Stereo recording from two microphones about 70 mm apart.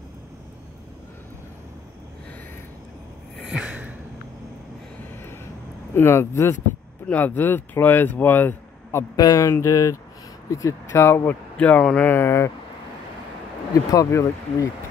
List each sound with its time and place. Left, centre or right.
3.4 s a sound: centre
5.2 s vehicle: left
5.9 s speech: left
7.1 s speech: left
9.1 s speech: left
9.4 s speech: left
10.9 s speech: left
11.5 s speech: centre
12.1 s speech: left
13.9 s speech: left